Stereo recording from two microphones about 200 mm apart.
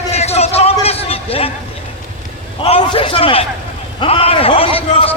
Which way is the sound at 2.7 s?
30° left (ahead or behind).